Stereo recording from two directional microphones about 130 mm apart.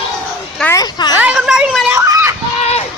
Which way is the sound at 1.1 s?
10° right (ahead or behind).